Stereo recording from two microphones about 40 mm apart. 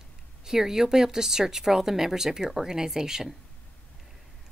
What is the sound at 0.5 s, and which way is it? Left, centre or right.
Speech, centre.